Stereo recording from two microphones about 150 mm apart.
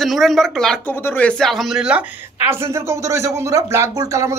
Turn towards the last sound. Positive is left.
turn(degrees=-20)  # may be behind; listen again after turning